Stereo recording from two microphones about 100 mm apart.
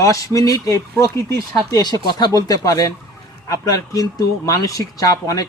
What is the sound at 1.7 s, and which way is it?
Speech, 40° left (ahead or behind).